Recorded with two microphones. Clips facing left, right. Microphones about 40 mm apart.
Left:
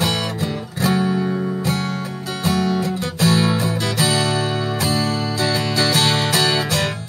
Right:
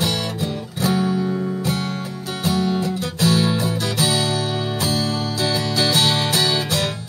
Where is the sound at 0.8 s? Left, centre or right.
Left.